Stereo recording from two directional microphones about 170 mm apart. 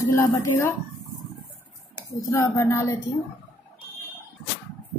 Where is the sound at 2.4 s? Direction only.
15° left (ahead or behind).